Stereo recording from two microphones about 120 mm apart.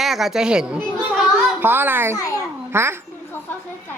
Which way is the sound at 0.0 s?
Centre (ahead or behind).